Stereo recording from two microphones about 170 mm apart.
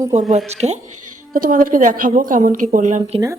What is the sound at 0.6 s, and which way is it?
Speech, 40° right (ahead or behind).